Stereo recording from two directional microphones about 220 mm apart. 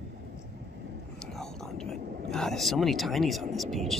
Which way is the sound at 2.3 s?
Centre (ahead or behind).